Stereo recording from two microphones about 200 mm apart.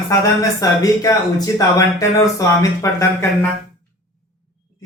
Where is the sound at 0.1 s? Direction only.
15° left (ahead or behind).